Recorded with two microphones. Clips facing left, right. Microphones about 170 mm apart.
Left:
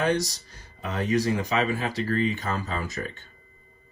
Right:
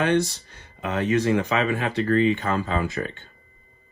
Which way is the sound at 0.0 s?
35° left (ahead or behind).